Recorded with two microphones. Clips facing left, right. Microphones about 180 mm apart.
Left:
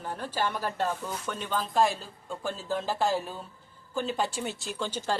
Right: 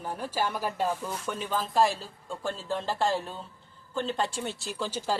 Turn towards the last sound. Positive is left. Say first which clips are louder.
# even
turn(degrees=-5)  # may be behind; listen again after turning